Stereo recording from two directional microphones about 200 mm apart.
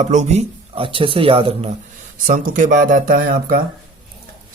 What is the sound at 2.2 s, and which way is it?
Speech, 40° right (ahead or behind).